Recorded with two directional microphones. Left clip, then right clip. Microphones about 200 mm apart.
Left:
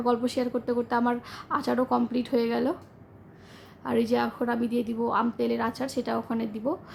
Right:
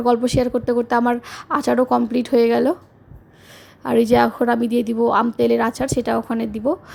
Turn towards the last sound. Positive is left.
turn(degrees=-35)  # may be behind; listen again after turning